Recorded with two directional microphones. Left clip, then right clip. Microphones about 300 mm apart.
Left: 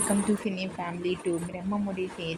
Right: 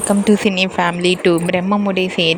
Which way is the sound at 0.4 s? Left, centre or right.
Right.